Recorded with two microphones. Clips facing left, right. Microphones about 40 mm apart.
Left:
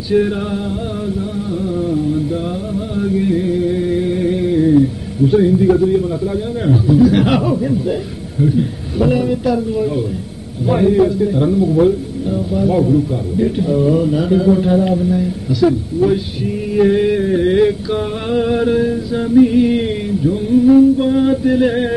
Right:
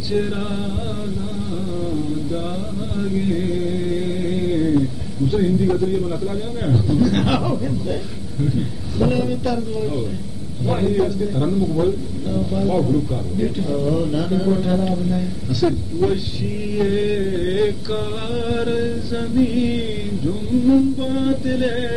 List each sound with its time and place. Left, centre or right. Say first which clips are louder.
3.0 s music: left 5 dB; centre